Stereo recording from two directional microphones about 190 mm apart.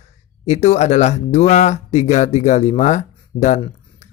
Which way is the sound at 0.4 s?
35° left (ahead or behind).